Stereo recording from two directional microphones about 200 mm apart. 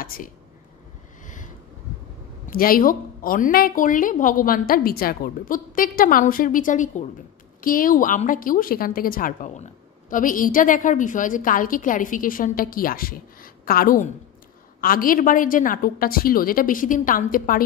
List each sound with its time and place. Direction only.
0.0 s speech: 45° left (ahead or behind)
1.2 s a sound: 40° left (ahead or behind)
2.4 s a woman's voice: 45° left (ahead or behind)